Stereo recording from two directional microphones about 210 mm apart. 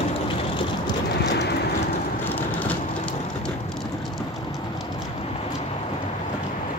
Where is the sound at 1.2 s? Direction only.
55° left (ahead or behind).